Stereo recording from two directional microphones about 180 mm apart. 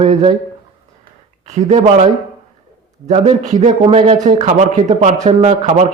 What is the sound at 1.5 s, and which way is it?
Speech, 40° right (ahead or behind).